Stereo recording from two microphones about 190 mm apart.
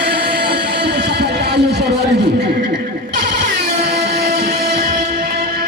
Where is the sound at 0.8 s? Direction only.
60° right (ahead or behind).